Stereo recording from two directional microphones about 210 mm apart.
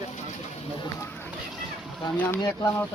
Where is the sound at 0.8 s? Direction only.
15° left (ahead or behind).